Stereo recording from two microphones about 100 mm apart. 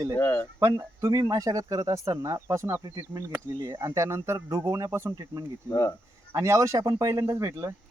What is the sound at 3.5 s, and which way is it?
Speech, 50° right (ahead or behind).